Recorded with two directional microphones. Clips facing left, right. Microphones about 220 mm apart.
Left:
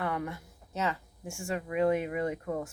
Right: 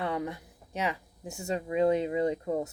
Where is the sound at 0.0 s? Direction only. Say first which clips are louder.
Right 2 dB; 20° right (ahead or behind).